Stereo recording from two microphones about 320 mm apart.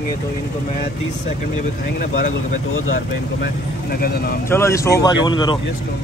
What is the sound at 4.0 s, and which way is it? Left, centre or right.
Speech, left.